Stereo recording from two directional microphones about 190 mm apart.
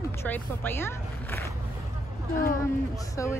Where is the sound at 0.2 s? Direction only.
10° left (ahead or behind).